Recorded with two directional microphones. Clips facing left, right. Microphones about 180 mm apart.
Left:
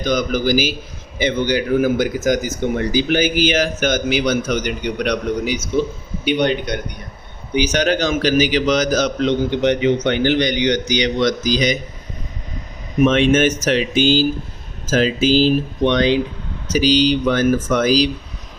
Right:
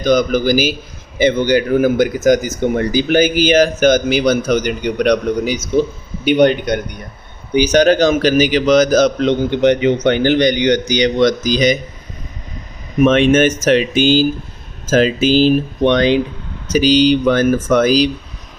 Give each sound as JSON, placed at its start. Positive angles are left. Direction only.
{"t": 0.1, "sound": "a man's voice", "side_deg": -50}
{"t": 13.1, "sound": "a man's voice", "side_deg": -55}